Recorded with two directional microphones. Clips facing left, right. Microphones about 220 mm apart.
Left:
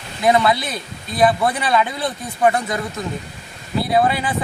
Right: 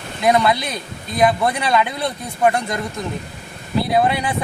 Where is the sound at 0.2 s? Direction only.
Centre (ahead or behind).